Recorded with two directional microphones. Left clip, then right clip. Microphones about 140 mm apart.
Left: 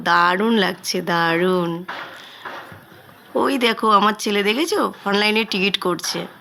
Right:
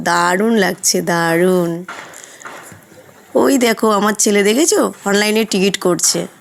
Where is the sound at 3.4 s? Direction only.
40° right (ahead or behind).